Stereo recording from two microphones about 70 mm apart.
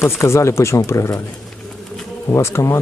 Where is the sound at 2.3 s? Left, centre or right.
Left.